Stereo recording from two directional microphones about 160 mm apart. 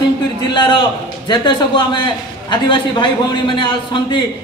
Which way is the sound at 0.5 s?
30° left (ahead or behind).